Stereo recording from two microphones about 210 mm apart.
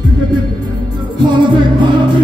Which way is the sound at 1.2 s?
20° right (ahead or behind).